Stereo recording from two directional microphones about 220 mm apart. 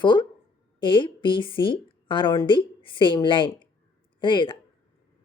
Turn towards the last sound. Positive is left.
turn(degrees=20)  # may be behind; listen again after turning